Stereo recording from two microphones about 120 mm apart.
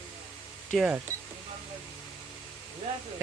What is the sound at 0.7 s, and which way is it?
Speech, 5° left (ahead or behind).